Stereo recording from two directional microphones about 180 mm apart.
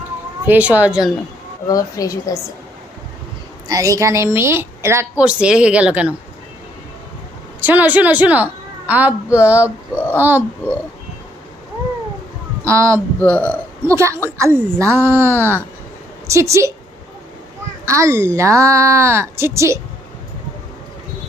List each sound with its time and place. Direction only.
0.4 s a woman's voice: 10° right (ahead or behind)
1.6 s a woman's voice: 20° left (ahead or behind)
3.7 s a woman's voice: 20° right (ahead or behind)
7.6 s a woman's voice: 10° right (ahead or behind)
12.6 s a woman's voice: 15° right (ahead or behind)
13.1 s speech: 10° left (ahead or behind)
13.8 s a woman's voice: 15° right (ahead or behind)
17.8 s a woman's voice: 15° right (ahead or behind)